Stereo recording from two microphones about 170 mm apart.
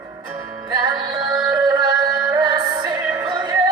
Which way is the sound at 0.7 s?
25° right (ahead or behind).